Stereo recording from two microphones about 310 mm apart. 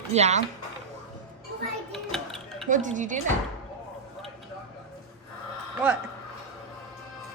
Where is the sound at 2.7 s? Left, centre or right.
Right.